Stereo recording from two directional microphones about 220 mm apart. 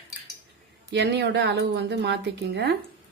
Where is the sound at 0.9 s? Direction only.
50° right (ahead or behind).